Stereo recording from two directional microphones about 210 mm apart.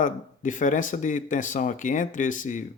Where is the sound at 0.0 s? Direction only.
35° left (ahead or behind).